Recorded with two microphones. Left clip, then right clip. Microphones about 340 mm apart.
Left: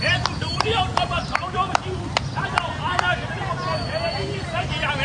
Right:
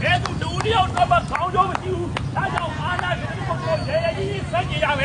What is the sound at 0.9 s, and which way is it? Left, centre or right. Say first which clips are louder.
Vehicle: right 4 dB; left.